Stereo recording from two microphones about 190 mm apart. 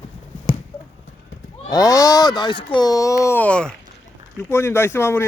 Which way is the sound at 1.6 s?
20° left (ahead or behind).